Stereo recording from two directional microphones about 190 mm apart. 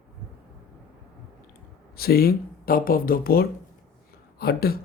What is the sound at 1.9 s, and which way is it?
A woman's voice, 55° left (ahead or behind).